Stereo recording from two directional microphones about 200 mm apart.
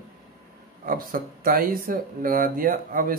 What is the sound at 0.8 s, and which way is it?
Speech, 45° right (ahead or behind).